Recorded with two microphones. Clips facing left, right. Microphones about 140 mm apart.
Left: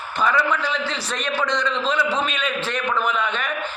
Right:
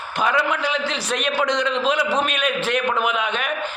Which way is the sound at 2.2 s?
60° right (ahead or behind).